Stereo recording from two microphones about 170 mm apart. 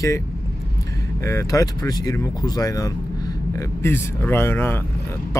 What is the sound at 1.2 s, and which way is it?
Speech, 20° left (ahead or behind).